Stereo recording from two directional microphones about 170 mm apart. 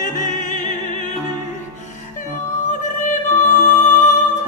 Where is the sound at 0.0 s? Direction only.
50° left (ahead or behind).